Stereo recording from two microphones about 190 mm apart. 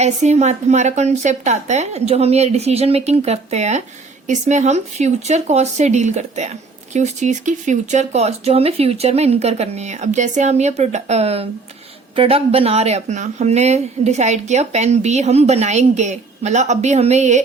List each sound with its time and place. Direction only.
0.0 s speech: 35° right (ahead or behind)